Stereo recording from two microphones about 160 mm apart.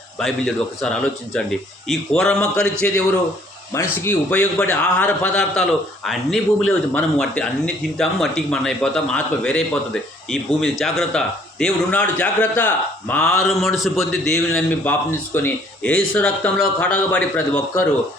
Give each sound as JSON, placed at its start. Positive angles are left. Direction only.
{"t": 0.2, "sound": "a man's voice", "side_deg": 0}